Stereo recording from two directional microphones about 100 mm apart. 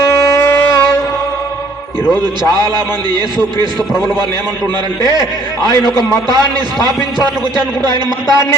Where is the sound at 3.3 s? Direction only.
50° right (ahead or behind).